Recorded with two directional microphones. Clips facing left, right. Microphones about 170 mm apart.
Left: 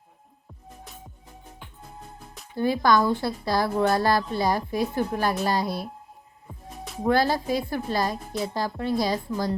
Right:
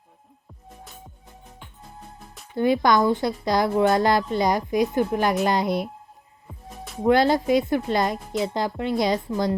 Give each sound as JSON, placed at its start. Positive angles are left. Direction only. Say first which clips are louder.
{"t": 2.6, "sound": "a woman's voice", "louder": "right 2 dB", "side_deg": -20}
{"t": 6.5, "sound": "music", "louder": "even", "side_deg": 0}
{"t": 7.1, "sound": "a woman's voice", "louder": "right 4 dB", "side_deg": -20}